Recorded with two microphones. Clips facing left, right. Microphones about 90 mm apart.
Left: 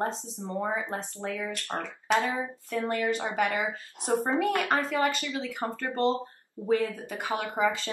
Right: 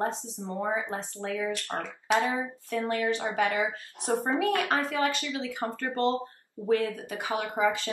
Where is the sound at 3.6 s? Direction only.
15° left (ahead or behind).